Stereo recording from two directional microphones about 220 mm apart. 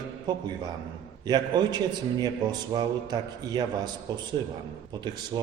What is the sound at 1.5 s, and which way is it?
A man's voice, 20° right (ahead or behind).